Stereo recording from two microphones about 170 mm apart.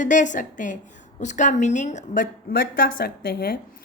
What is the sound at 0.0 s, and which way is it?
A woman's voice, 50° left (ahead or behind).